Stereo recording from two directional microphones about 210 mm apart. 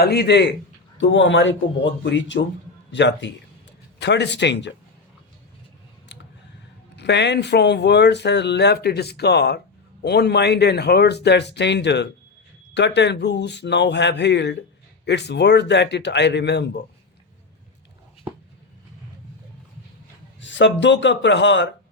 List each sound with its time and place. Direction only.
0.0 s speech: 50° left (ahead or behind)
6.1 s a sound: 60° left (ahead or behind)
6.9 s speech: 55° left (ahead or behind)
20.4 s speech: 60° left (ahead or behind)